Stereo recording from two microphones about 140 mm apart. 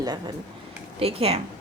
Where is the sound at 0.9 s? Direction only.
45° right (ahead or behind).